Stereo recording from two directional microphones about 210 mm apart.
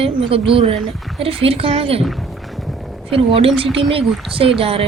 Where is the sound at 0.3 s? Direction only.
25° right (ahead or behind).